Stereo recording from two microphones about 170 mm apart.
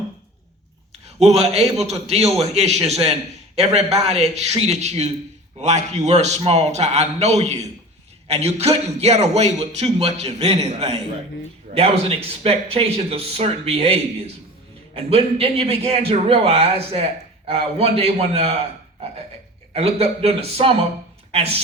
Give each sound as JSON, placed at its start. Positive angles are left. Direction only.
{"t": 1.0, "sound": "a man's voice", "side_deg": -40}
{"t": 19.7, "sound": "a man's voice", "side_deg": -35}